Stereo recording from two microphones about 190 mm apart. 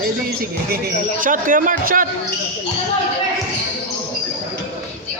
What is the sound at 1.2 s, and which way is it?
Speech, 45° right (ahead or behind).